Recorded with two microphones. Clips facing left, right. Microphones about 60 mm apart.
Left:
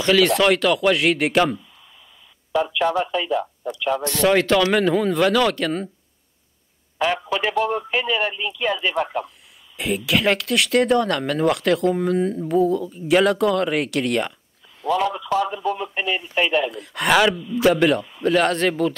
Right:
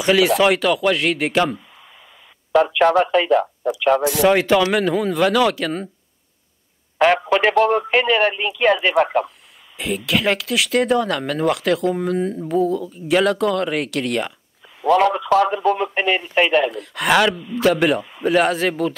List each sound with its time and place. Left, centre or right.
0.0 s speech: centre
2.5 s speech: right
4.1 s speech: centre
7.0 s speech: right
9.8 s speech: centre
14.8 s speech: right
16.7 s speech: centre